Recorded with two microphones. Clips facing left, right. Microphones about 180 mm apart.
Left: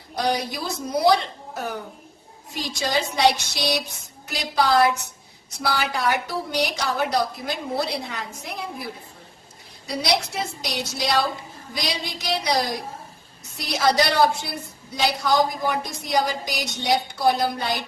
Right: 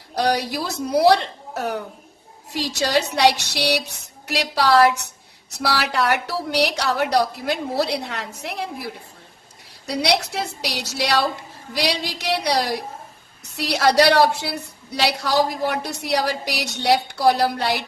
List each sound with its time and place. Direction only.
0.2 s a woman's voice: 70° right (ahead or behind)